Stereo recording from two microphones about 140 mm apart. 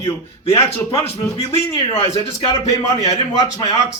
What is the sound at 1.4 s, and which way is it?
A man's voice, 40° left (ahead or behind).